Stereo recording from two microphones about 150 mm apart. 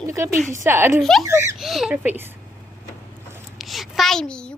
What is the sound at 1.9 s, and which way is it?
Speech, 10° right (ahead or behind).